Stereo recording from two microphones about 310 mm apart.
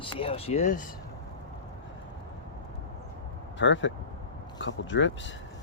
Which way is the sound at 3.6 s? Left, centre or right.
Left.